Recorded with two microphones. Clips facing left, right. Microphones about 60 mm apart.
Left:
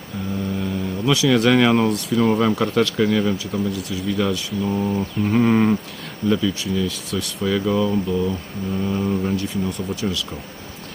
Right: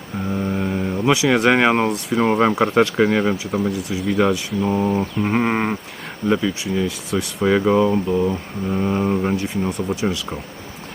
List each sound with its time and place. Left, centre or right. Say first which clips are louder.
0.3 s mantra: right 3 dB; right
1.1 s speech: even; right
9.3 s speech: right 2 dB; right